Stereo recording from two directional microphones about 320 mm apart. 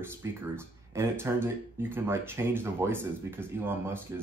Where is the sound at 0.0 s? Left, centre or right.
Centre.